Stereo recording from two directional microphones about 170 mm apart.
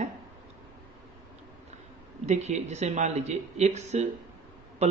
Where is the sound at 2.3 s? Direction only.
40° right (ahead or behind).